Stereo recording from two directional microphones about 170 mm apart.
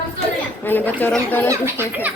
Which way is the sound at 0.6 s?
10° left (ahead or behind).